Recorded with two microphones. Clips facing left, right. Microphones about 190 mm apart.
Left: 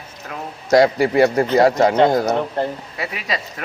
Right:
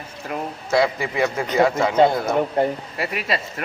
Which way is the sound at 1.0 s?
40° left (ahead or behind).